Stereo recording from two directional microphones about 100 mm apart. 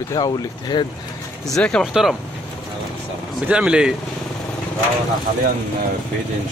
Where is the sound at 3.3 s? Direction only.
10° right (ahead or behind).